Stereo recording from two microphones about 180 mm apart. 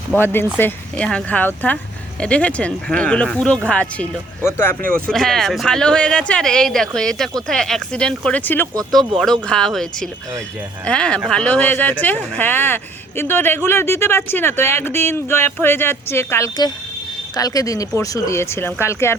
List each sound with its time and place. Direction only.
0.1 s speech: 10° left (ahead or behind)